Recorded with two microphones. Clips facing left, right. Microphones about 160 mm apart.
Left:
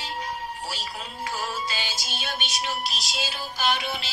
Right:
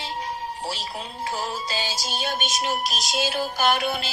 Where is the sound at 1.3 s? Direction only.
35° right (ahead or behind).